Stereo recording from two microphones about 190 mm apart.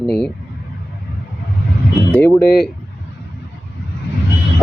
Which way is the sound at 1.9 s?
5° left (ahead or behind).